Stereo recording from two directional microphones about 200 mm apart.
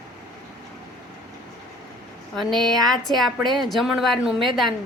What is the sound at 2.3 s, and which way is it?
A woman's voice, centre (ahead or behind).